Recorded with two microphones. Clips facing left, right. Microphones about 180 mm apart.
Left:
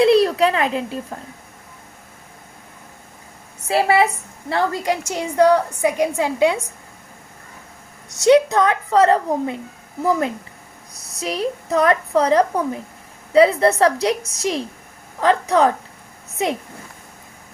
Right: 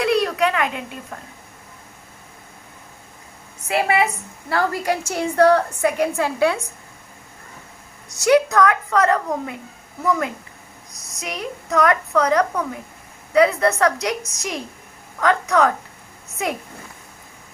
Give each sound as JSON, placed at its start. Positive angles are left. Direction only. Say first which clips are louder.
{"t": 0.0, "sound": "a child's voice", "louder": "left 5 dB", "side_deg": 30}
{"t": 3.7, "sound": "a woman's voice", "louder": "left 3 dB", "side_deg": 30}
{"t": 8.1, "sound": "a woman's voice", "louder": "left 3 dB", "side_deg": 25}